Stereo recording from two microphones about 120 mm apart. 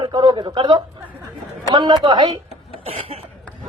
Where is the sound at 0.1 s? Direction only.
40° right (ahead or behind).